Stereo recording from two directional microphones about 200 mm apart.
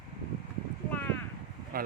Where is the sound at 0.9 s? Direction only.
10° left (ahead or behind).